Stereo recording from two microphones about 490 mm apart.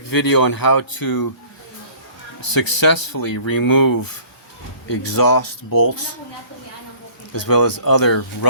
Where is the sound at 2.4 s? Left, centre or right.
Left.